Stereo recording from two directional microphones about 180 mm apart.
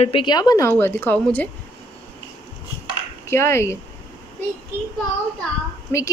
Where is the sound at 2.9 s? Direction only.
15° left (ahead or behind).